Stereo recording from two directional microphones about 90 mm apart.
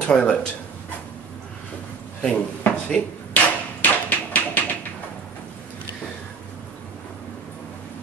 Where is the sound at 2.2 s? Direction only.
15° left (ahead or behind).